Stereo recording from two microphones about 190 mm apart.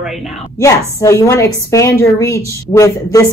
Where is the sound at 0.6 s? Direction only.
15° left (ahead or behind).